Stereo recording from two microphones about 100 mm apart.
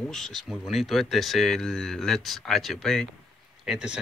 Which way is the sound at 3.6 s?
5° right (ahead or behind).